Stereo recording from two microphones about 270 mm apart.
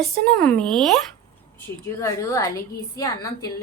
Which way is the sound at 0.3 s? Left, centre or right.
Centre.